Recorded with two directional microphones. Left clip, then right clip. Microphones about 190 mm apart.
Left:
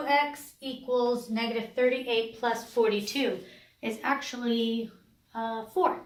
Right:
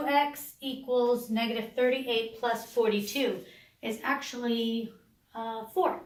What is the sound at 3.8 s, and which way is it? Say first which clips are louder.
Speech: left 2 dB; 55° left (ahead or behind).